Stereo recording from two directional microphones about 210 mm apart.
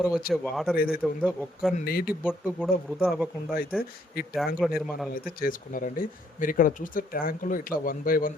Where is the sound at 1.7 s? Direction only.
45° left (ahead or behind).